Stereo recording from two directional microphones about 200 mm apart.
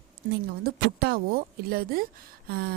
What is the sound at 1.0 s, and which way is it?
A woman's voice, 50° right (ahead or behind).